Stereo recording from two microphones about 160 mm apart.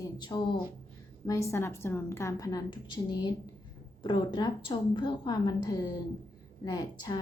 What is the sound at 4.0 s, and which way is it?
A woman's voice, 30° left (ahead or behind).